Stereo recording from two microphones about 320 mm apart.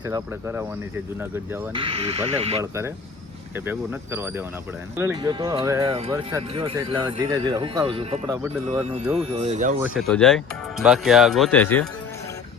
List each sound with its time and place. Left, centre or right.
0.0 s speech: centre
1.8 s speech: centre
9.8 s speech: centre